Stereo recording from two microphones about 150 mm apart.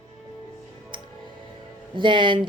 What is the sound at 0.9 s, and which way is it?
Music, 35° right (ahead or behind).